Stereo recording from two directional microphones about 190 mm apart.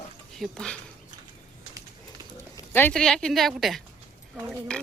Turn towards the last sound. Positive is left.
turn(degrees=5)  # may be behind; listen again after turning